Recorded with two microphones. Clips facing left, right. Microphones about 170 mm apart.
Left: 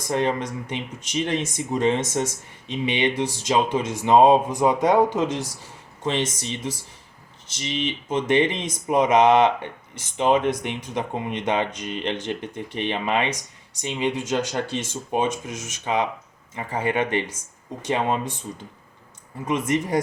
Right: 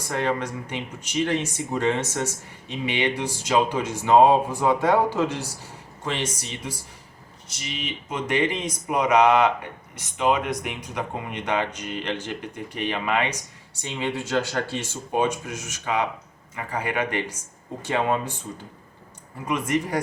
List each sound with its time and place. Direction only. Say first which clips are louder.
0.1 s speech: left 2 dB; 20° left (ahead or behind)